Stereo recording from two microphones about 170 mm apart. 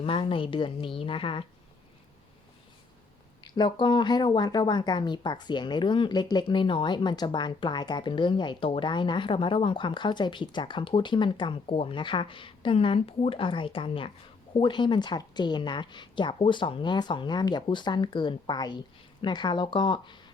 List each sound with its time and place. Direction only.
0.0 s a woman's voice: 30° left (ahead or behind)
3.4 s speech: 25° left (ahead or behind)